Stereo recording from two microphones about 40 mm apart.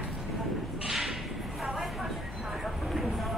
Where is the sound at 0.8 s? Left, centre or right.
Centre.